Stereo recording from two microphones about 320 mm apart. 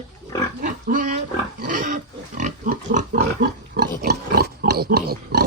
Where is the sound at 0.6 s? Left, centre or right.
Right.